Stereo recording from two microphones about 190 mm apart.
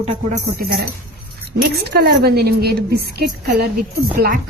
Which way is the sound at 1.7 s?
55° right (ahead or behind).